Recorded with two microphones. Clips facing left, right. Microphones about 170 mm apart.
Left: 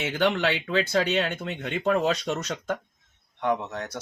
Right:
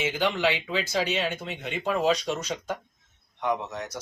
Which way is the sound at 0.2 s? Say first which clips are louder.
Left 4 dB; 60° left (ahead or behind).